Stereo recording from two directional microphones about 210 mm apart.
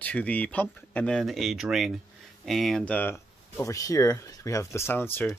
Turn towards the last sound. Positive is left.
turn(degrees=10)  # may be behind; listen again after turning